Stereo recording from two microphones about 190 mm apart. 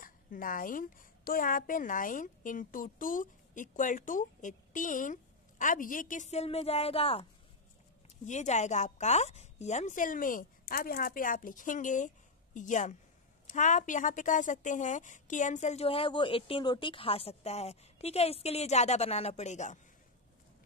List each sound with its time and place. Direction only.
0.0 s a woman's voice: 45° left (ahead or behind); by 7.2 s 30° left (ahead or behind)
8.3 s speech: 40° left (ahead or behind)